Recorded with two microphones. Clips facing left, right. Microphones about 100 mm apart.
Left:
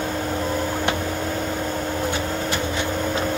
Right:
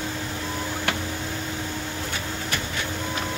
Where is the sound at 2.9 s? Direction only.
50° left (ahead or behind).